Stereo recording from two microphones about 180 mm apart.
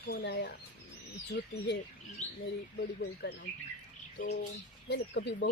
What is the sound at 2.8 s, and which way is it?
Speech, 70° left (ahead or behind).